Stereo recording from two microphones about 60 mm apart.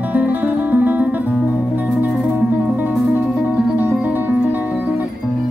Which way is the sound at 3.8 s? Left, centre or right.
Right.